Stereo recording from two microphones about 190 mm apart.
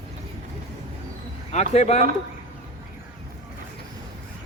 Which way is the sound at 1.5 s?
35° left (ahead or behind).